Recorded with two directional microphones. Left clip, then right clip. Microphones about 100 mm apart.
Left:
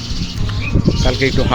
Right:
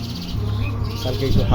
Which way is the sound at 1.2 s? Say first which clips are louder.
Left 8 dB; 45° left (ahead or behind).